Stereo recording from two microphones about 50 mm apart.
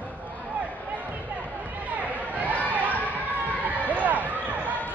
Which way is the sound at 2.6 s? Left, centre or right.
Right.